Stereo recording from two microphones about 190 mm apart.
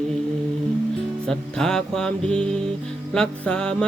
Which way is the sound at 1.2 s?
5° left (ahead or behind).